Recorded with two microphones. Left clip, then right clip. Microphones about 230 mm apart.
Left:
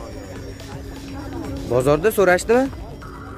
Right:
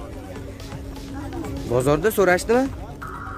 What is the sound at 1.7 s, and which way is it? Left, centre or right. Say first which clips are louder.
Speech: left 3 dB; centre.